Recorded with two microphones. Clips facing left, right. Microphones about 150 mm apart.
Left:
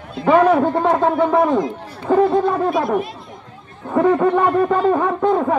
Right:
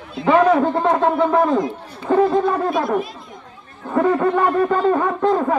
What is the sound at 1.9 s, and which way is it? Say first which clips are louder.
Chatter: left 1 dB; 5° left (ahead or behind).